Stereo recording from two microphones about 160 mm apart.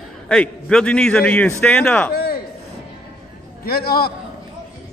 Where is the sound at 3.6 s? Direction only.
75° left (ahead or behind).